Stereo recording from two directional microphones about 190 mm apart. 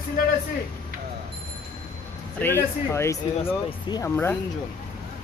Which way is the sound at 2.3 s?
10° left (ahead or behind).